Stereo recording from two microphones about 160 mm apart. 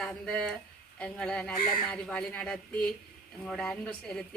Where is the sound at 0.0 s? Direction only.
5° left (ahead or behind).